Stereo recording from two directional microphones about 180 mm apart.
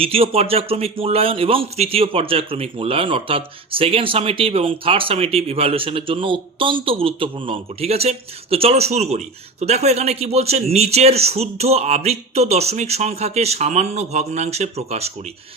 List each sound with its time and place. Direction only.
0.0 s a man's voice: 30° right (ahead or behind)